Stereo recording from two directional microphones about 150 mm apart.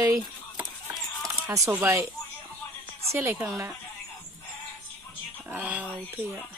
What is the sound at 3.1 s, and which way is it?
Speech, 15° right (ahead or behind).